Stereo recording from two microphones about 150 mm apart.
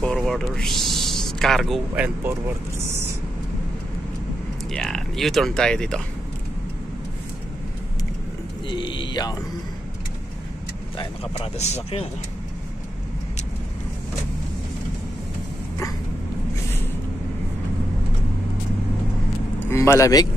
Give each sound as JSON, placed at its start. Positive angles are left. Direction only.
{"t": 0.0, "sound": "speech", "side_deg": 0}
{"t": 4.7, "sound": "speech", "side_deg": 5}
{"t": 8.6, "sound": "speech", "side_deg": 30}
{"t": 11.5, "sound": "speech", "side_deg": 45}
{"t": 19.7, "sound": "speech", "side_deg": 20}